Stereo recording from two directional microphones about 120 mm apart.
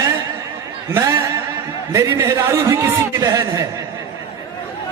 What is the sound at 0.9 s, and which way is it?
Speech, 25° right (ahead or behind).